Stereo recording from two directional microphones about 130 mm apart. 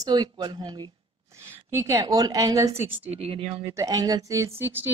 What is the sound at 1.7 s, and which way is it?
A woman's voice, 20° right (ahead or behind).